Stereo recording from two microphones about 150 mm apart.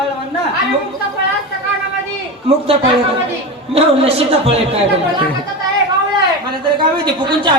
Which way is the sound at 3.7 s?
40° right (ahead or behind).